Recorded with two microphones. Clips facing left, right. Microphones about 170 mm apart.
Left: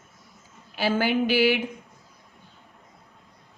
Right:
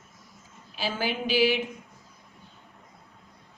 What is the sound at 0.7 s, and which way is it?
Speech, 60° left (ahead or behind).